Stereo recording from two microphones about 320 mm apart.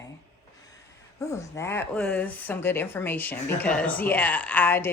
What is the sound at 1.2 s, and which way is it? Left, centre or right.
Speech, centre.